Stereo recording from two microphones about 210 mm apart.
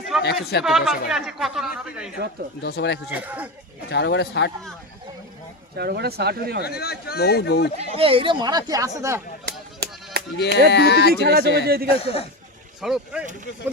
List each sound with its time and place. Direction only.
0.1 s speech: centre (ahead or behind)
2.6 s speech: 50° left (ahead or behind)
3.1 s speech: 10° right (ahead or behind)
3.8 s speech: 55° left (ahead or behind)
5.7 s speech: 50° right (ahead or behind)
6.6 s speech: 50° left (ahead or behind)
7.8 s speech: 25° right (ahead or behind)
10.3 s speech: 55° left (ahead or behind)
11.1 s speech: 50° right (ahead or behind)
11.9 s a man's voice: 25° left (ahead or behind)
12.8 s speech: centre (ahead or behind)